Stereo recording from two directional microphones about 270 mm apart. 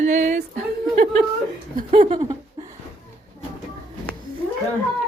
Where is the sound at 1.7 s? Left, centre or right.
Right.